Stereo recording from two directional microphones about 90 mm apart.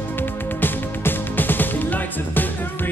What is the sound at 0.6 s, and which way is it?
Music, 20° left (ahead or behind).